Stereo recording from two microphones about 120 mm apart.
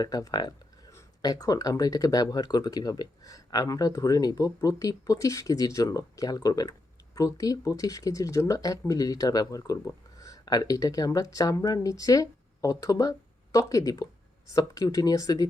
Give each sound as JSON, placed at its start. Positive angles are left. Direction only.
{"t": 0.0, "sound": "speech", "side_deg": 30}